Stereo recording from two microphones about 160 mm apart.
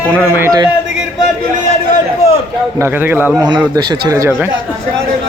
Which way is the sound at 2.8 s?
10° right (ahead or behind).